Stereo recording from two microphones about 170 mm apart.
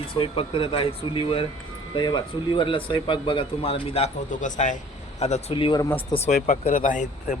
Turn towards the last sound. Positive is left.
turn(degrees=50)  # may be behind; listen again after turning